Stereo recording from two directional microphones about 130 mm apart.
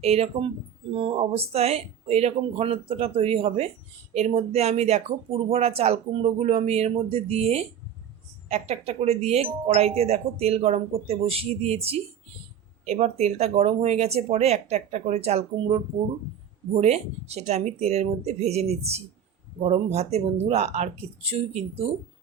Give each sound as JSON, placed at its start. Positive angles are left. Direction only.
{"t": 0.0, "sound": "speech", "side_deg": -50}
{"t": 16.7, "sound": "speech", "side_deg": -55}